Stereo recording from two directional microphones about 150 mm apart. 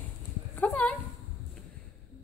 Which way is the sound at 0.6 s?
10° left (ahead or behind).